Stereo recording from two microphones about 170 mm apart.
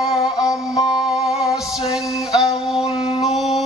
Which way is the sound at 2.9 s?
35° left (ahead or behind).